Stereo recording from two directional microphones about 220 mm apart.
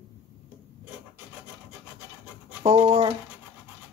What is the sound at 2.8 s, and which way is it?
Speech, 25° right (ahead or behind).